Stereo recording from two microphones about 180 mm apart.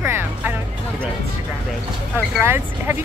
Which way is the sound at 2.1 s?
10° right (ahead or behind).